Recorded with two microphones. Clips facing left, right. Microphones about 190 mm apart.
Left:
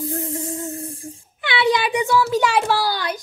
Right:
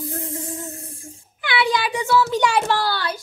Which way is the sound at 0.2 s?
30° left (ahead or behind).